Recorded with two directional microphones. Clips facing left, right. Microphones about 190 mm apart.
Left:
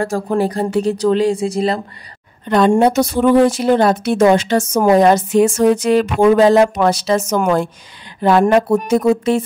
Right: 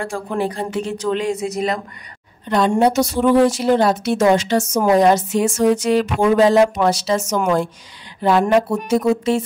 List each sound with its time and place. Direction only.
0.0 s speech: 40° left (ahead or behind)
2.5 s a woman's voice: 60° left (ahead or behind)